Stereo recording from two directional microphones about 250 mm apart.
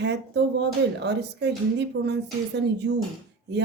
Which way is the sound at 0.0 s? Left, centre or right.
Right.